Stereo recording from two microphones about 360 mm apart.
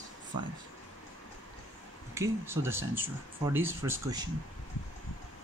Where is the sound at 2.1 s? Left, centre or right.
Centre.